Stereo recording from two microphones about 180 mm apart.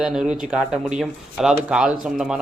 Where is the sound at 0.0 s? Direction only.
5° right (ahead or behind).